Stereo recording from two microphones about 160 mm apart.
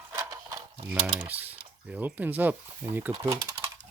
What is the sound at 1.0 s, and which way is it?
Speech, 15° right (ahead or behind).